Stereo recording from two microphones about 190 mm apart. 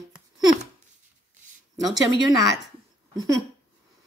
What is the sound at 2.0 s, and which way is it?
Speech, 20° right (ahead or behind).